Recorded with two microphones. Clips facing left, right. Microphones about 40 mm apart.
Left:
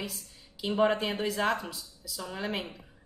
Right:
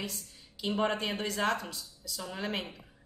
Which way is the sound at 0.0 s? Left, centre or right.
Centre.